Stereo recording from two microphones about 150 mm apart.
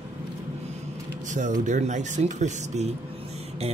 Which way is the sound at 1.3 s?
55° right (ahead or behind).